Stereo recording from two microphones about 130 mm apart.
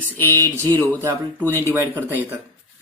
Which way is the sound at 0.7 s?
15° left (ahead or behind).